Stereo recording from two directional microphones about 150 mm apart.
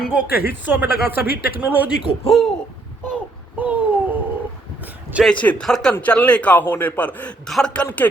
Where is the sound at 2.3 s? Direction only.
Centre (ahead or behind).